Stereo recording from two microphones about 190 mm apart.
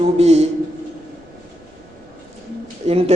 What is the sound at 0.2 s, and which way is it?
Speech, 35° right (ahead or behind).